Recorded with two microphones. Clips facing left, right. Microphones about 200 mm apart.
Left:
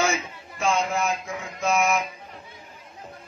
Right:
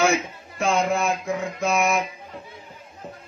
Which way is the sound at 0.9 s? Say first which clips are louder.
Right 3 dB; 35° right (ahead or behind).